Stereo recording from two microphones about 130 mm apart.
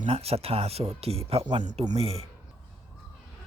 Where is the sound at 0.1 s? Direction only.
50° right (ahead or behind).